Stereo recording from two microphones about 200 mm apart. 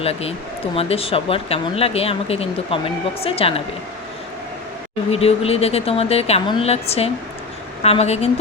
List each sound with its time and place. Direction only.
0.0 s speech: 30° left (ahead or behind)
5.1 s speech: 30° left (ahead or behind)